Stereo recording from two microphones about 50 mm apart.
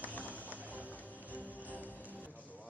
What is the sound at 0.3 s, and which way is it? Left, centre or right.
Music, right.